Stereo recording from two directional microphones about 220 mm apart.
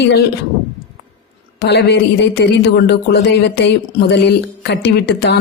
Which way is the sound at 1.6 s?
50° left (ahead or behind).